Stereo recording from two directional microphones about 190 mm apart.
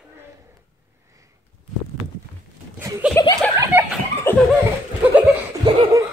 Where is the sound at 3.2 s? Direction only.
15° left (ahead or behind).